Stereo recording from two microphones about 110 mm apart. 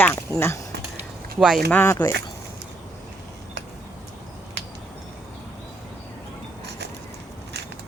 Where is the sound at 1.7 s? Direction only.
15° left (ahead or behind).